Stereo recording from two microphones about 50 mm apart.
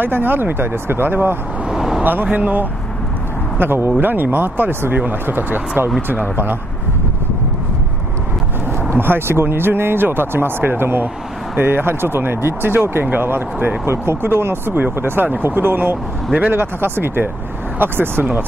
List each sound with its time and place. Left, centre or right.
0.0 s speech: right
1.7 s vehicle: centre
2.3 s speech: right
3.5 s speech: right
8.9 s speech: right
13.0 s speech: right
13.8 s speech: right